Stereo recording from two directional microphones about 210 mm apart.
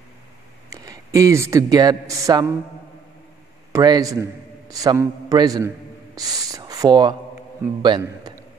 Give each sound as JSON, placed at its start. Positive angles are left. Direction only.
{"t": 0.7, "sound": "speech", "side_deg": -15}
{"t": 3.7, "sound": "a man's voice", "side_deg": -20}